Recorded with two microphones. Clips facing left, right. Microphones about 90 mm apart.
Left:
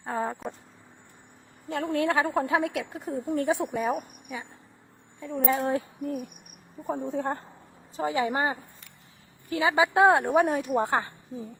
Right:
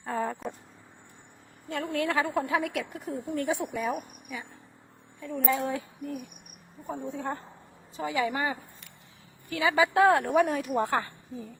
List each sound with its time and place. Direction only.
0.0 s a sound: 30° left (ahead or behind)
1.9 s a woman's voice: 35° left (ahead or behind)
5.5 s a woman's voice: 35° left (ahead or behind); by 11.5 s 20° left (ahead or behind)